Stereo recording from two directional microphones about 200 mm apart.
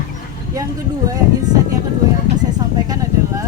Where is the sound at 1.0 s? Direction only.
15° right (ahead or behind).